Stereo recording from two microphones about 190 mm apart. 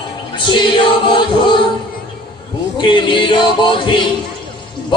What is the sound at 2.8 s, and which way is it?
Music, 25° left (ahead or behind).